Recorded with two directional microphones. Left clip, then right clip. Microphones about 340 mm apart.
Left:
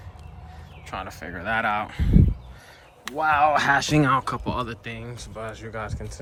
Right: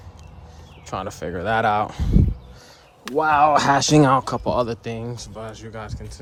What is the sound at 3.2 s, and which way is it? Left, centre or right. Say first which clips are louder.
Speech: right 3 dB; right.